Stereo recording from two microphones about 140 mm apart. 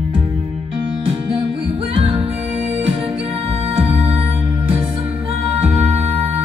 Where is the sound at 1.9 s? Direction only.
40° right (ahead or behind).